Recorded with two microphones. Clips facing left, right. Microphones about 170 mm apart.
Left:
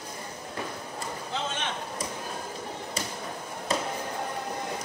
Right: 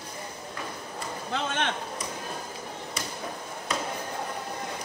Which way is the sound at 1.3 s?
60° right (ahead or behind).